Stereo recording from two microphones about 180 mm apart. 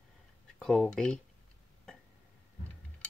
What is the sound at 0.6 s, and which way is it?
Speech, 5° left (ahead or behind).